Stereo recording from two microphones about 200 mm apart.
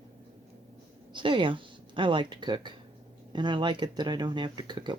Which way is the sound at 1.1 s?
25° right (ahead or behind).